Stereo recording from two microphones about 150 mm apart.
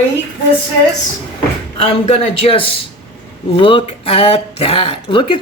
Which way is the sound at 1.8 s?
45° left (ahead or behind).